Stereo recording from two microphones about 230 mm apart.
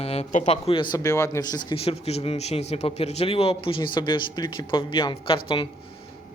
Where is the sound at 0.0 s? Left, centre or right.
Left.